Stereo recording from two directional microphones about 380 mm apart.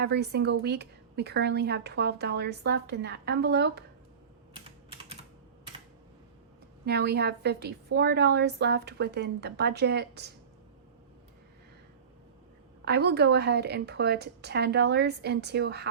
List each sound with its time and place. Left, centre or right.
0.0 s a woman's voice: right
6.8 s a woman's voice: right
12.8 s a woman's voice: right